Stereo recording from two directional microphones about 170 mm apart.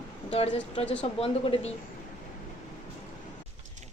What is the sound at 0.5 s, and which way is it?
A woman's voice, 35° left (ahead or behind).